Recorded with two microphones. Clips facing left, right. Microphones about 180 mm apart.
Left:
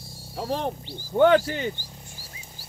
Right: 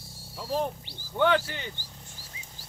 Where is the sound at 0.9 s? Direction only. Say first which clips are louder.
Left 7 dB; 40° left (ahead or behind).